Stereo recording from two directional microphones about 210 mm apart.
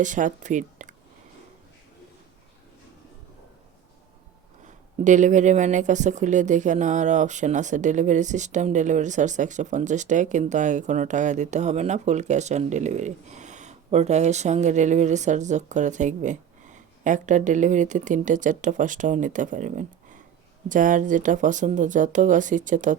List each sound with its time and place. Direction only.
0.0 s speech: 35° right (ahead or behind)
4.6 s speech: 35° right (ahead or behind)